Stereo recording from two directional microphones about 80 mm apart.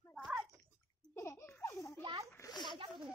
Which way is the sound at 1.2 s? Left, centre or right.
Left.